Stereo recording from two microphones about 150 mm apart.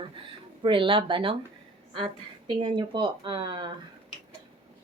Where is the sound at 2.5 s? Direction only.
30° right (ahead or behind).